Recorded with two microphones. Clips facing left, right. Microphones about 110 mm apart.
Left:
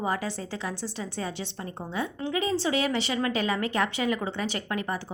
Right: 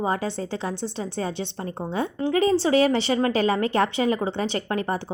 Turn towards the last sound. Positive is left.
turn(degrees=-35)  # may be behind; listen again after turning